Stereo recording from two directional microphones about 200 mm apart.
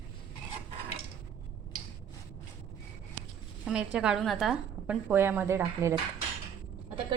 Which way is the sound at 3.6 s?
5° right (ahead or behind).